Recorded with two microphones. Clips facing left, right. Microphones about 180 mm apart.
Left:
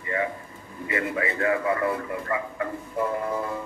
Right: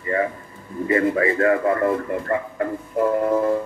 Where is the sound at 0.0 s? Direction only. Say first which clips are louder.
Right 5 dB; 40° right (ahead or behind).